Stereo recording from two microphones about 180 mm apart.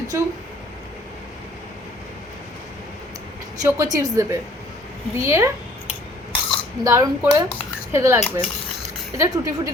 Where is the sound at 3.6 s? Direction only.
20° right (ahead or behind).